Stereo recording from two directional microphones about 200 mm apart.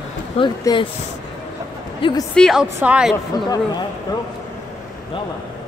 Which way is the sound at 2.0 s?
25° left (ahead or behind).